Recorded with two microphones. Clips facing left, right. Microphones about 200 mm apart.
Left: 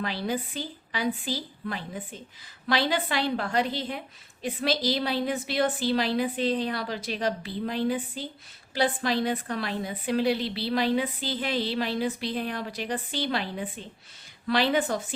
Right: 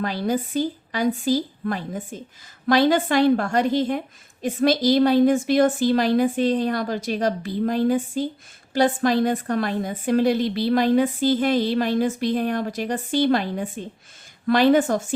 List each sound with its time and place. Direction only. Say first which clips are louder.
0.0 s a woman's voice: right 6 dB; 45° right (ahead or behind)